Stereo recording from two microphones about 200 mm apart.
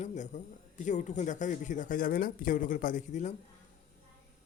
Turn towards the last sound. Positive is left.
turn(degrees=40)  # may be behind; listen again after turning